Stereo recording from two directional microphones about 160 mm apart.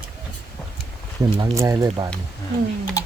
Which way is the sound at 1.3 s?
20° right (ahead or behind).